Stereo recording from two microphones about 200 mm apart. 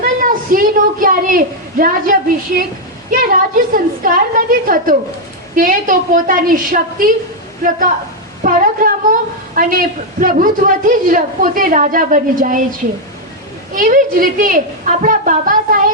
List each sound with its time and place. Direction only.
0.0 s a woman's voice: 45° right (ahead or behind)
13.7 s a man's voice: 45° right (ahead or behind)